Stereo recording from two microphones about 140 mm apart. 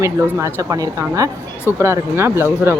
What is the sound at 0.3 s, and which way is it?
Speech, 25° right (ahead or behind).